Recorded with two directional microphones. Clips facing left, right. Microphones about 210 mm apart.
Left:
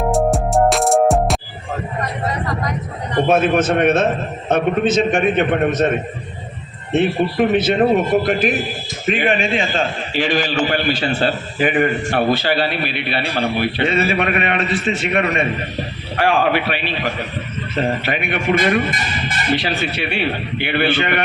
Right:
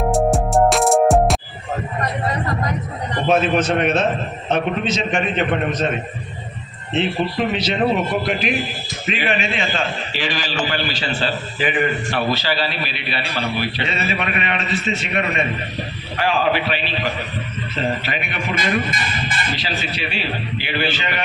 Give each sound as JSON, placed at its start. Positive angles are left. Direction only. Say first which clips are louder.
{"t": 0.1, "sound": "music", "louder": "even", "side_deg": 0}
{"t": 3.2, "sound": "a man's voice", "louder": "left 1 dB", "side_deg": 50}
{"t": 6.9, "sound": "a man's voice", "louder": "left 4 dB", "side_deg": 50}